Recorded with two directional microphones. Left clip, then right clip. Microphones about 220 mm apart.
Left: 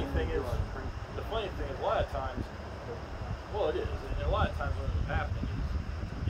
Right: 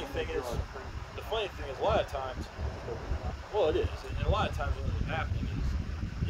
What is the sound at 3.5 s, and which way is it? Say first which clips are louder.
Speech: right 3 dB; 50° right (ahead or behind).